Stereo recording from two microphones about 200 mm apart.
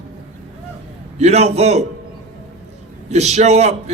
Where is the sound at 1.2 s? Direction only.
35° right (ahead or behind).